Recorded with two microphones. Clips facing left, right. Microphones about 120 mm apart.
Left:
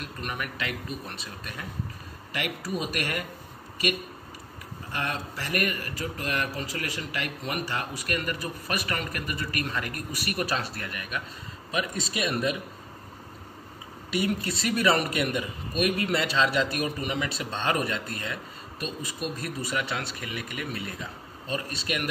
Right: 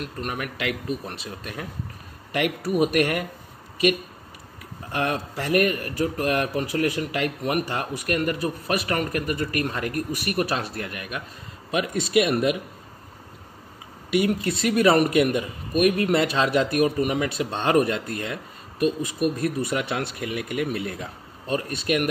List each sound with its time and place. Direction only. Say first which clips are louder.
0.3 s speech: right 4 dB; 60° right (ahead or behind)
2.3 s speech: right 8 dB; 60° right (ahead or behind)
4.9 s speech: right 7 dB; 60° right (ahead or behind)
14.1 s a man's voice: right 6 dB; 55° right (ahead or behind)